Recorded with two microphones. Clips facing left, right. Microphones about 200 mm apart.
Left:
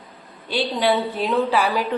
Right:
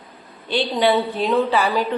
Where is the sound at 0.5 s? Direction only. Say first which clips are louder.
Right 2 dB; 5° left (ahead or behind).